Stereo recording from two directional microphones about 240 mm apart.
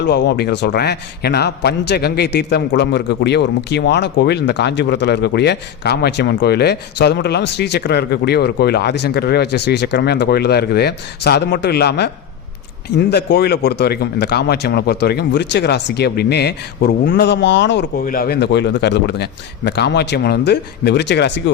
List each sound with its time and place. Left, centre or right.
0.1 s a man's voice: left